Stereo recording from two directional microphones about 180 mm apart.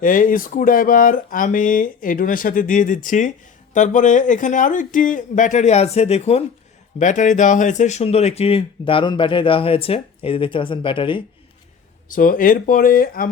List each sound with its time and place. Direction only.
0.0 s speech: 45° left (ahead or behind); by 11.2 s 30° left (ahead or behind)
12.0 s speech: 50° left (ahead or behind)